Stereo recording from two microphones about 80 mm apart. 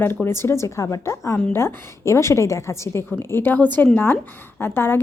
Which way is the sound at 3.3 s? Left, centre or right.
Left.